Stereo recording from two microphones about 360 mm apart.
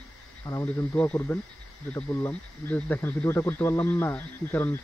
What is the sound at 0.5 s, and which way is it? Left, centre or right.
Speech, centre.